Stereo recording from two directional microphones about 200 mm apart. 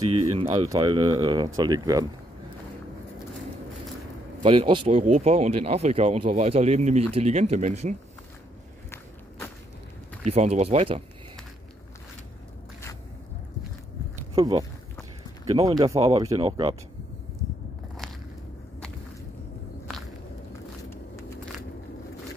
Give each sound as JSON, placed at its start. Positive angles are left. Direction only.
{"t": 0.3, "sound": "speech", "side_deg": -30}
{"t": 0.7, "sound": "speech", "side_deg": -20}
{"t": 4.4, "sound": "speech", "side_deg": -25}
{"t": 10.2, "sound": "speech", "side_deg": -35}
{"t": 14.3, "sound": "speech", "side_deg": -20}